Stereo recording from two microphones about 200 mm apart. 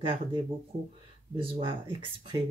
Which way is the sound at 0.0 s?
25° right (ahead or behind).